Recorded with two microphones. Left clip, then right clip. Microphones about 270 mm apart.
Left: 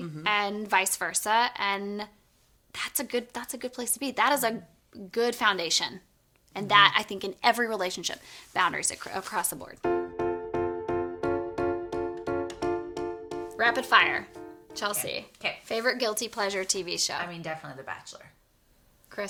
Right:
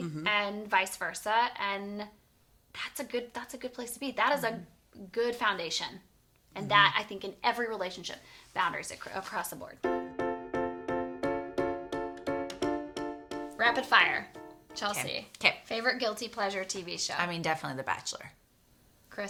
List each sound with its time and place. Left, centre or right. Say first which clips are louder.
0.2 s a woman's voice: left 3 dB; left
10.2 s music: left 3 dB; centre
13.6 s a woman's voice: left 3 dB; left
17.2 s speech: right 3 dB; right
19.1 s a sound: left 4 dB; left